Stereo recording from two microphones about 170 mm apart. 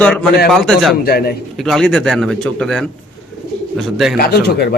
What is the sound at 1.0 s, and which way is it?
Speech, 65° left (ahead or behind).